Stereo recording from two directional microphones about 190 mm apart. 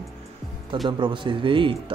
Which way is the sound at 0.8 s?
25° right (ahead or behind).